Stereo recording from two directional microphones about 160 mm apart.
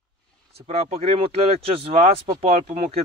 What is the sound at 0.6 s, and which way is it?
Speech, 40° right (ahead or behind).